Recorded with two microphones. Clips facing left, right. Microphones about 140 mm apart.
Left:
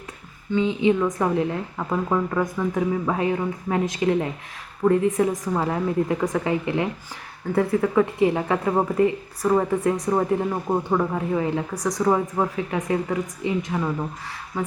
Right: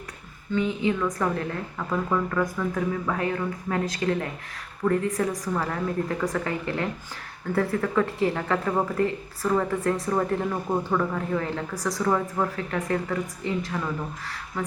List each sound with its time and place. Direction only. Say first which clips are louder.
0.5 s a woman's voice: left 5 dB; 20° left (ahead or behind)